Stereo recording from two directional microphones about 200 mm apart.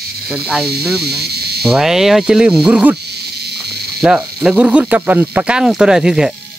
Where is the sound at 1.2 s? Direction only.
50° right (ahead or behind).